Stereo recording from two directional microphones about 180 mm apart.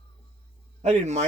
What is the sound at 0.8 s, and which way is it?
Speech, 40° right (ahead or behind).